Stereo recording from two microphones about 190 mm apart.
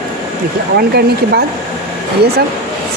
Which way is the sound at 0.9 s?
60° right (ahead or behind).